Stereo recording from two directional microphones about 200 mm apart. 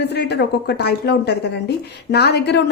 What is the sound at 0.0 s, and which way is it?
A woman's voice, 55° left (ahead or behind).